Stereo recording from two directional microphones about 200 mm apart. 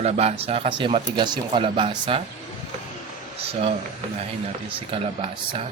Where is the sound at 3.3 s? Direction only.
30° right (ahead or behind).